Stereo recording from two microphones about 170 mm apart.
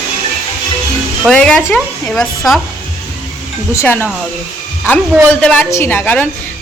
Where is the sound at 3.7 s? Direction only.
15° left (ahead or behind).